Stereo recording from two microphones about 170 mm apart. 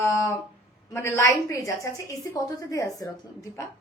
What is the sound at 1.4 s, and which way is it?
A woman's voice, 20° left (ahead or behind).